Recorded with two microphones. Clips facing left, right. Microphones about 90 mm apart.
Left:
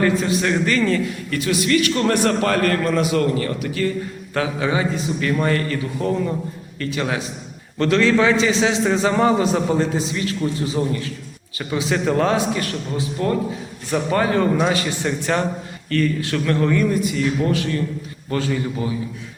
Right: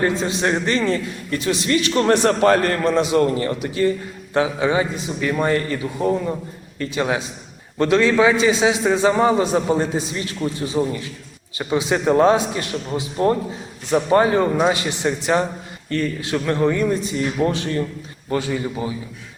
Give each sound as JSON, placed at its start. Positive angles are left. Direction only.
{"t": 0.0, "sound": "a man's voice", "side_deg": -25}
{"t": 18.3, "sound": "a man's voice", "side_deg": -15}